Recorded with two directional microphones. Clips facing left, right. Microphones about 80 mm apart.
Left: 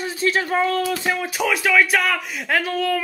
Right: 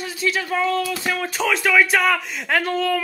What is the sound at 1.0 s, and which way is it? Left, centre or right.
Speech, centre.